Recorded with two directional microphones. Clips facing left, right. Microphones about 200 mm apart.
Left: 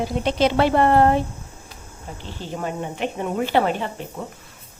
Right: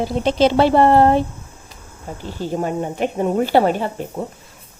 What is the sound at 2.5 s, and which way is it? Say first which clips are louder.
Speech: right 5 dB; 40° right (ahead or behind).